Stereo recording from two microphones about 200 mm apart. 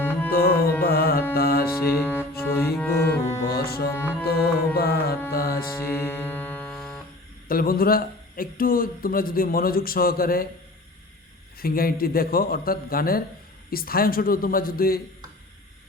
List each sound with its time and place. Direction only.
0.0 s music: 10° left (ahead or behind)
0.3 s music: 50° left (ahead or behind)
0.8 s carnatic music: 50° left (ahead or behind)
1.4 s music: 50° left (ahead or behind)
1.8 s music: 10° left (ahead or behind)
3.5 s music: 50° left (ahead or behind)
3.8 s music: 10° left (ahead or behind)
4.3 s music: 50° left (ahead or behind)
5.7 s music: 10° left (ahead or behind)
7.4 s speech: 45° left (ahead or behind)
11.6 s a man's voice: 45° left (ahead or behind)